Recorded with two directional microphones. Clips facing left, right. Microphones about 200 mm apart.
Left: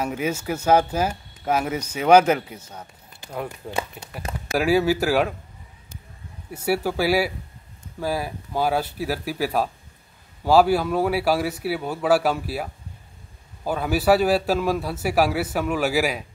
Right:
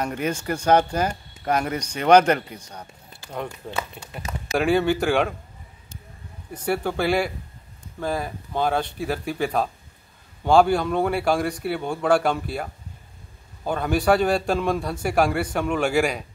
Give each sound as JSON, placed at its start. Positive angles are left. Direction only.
{"t": 0.0, "sound": "speech", "side_deg": 5}
{"t": 6.5, "sound": "speech", "side_deg": 5}
{"t": 13.7, "sound": "speech", "side_deg": 5}